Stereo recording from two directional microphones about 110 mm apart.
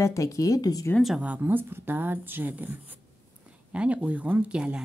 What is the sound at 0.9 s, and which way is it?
Speech, centre (ahead or behind).